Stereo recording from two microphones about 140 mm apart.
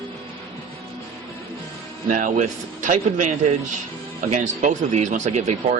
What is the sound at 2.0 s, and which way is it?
A man's voice, 70° right (ahead or behind).